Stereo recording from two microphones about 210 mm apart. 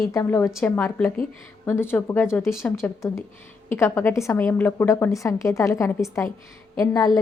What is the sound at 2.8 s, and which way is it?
A woman's voice, 15° left (ahead or behind).